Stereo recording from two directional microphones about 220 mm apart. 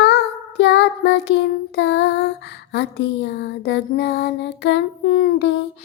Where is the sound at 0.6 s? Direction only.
55° left (ahead or behind).